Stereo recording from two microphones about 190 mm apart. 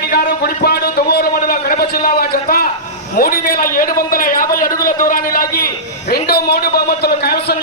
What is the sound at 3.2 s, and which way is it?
A man's voice, 50° left (ahead or behind).